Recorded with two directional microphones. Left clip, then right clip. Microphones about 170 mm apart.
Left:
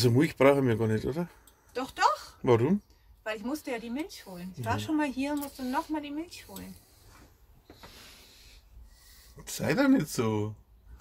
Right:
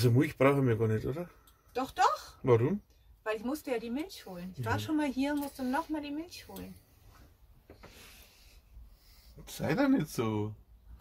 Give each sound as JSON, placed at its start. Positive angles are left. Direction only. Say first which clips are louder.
{"t": 0.0, "sound": "speech", "louder": "left 4 dB", "side_deg": 30}
{"t": 1.7, "sound": "a sound", "louder": "left 2 dB", "side_deg": -25}
{"t": 2.4, "sound": "speech", "louder": "left 2 dB", "side_deg": 30}
{"t": 3.3, "sound": "speech", "louder": "even", "side_deg": -20}
{"t": 9.4, "sound": "speech", "louder": "left 3 dB", "side_deg": 25}